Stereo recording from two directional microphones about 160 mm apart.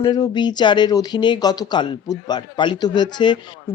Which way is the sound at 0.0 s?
25° left (ahead or behind).